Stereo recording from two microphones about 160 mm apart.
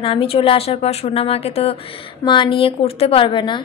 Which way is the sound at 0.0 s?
35° left (ahead or behind).